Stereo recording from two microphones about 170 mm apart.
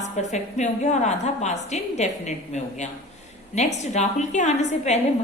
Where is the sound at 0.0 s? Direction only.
45° left (ahead or behind).